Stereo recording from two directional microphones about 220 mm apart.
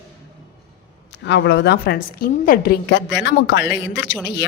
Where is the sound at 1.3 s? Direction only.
55° left (ahead or behind).